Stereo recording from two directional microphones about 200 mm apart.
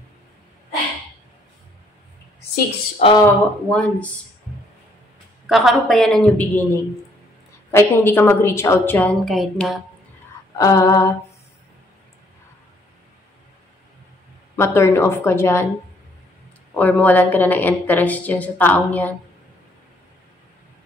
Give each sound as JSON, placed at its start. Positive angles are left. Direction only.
{"t": 3.0, "sound": "speech", "side_deg": 25}
{"t": 3.3, "sound": "a woman's voice", "side_deg": 5}
{"t": 5.5, "sound": "a woman's voice", "side_deg": 0}
{"t": 10.6, "sound": "a woman's voice", "side_deg": 15}
{"t": 14.5, "sound": "a woman's voice", "side_deg": 10}
{"t": 16.7, "sound": "a woman's voice", "side_deg": 10}